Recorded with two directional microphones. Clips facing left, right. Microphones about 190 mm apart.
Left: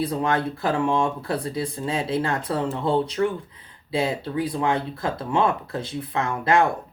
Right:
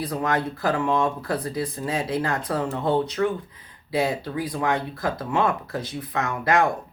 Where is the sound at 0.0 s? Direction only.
25° left (ahead or behind).